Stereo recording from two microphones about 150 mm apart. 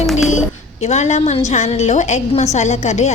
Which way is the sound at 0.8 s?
50° left (ahead or behind).